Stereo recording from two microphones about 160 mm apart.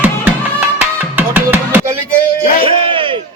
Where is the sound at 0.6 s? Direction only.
10° right (ahead or behind).